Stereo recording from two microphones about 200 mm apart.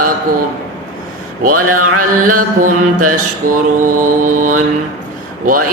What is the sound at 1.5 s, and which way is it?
Mantra, 90° right.